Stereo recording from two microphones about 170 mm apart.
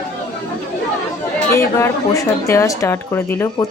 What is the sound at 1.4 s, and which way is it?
Speech, 15° left (ahead or behind).